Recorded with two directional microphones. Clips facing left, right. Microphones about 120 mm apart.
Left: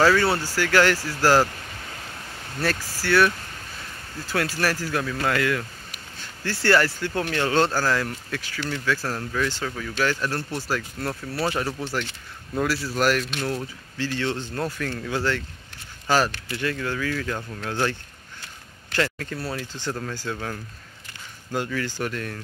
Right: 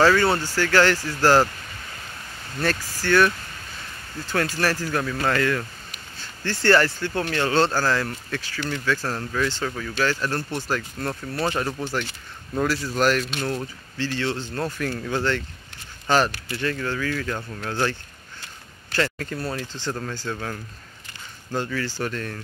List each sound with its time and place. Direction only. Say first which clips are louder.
0.0 s speech: right 1 dB; 10° left (ahead or behind)
2.6 s speech: right 1 dB; 5° left (ahead or behind)
11.8 s speech: right 1 dB; 5° right (ahead or behind)
13.9 s speech: even; 15° left (ahead or behind)
15.0 s speech: even; 5° left (ahead or behind)
17.4 s speech: even; 5° right (ahead or behind)
17.6 s speech: even; 15° left (ahead or behind)
18.9 s speech: right 1 dB; centre (ahead or behind)